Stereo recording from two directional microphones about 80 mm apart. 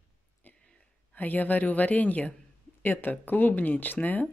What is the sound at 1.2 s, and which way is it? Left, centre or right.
Speech, left.